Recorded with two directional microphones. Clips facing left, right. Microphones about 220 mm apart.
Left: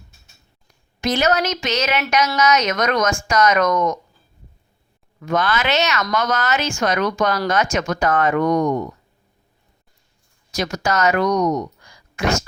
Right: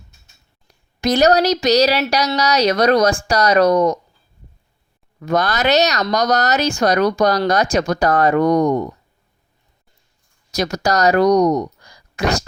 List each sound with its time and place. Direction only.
0.7 s speech: 40° right (ahead or behind)
5.2 s speech: 40° right (ahead or behind)
10.5 s speech: 40° right (ahead or behind)